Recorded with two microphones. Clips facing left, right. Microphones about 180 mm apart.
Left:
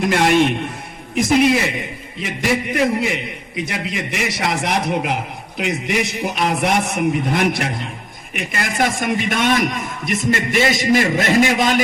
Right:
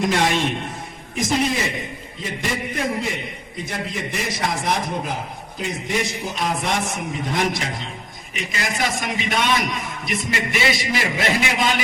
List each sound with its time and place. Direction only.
0.1 s a man's voice: 60° left (ahead or behind); by 11.7 s 45° left (ahead or behind)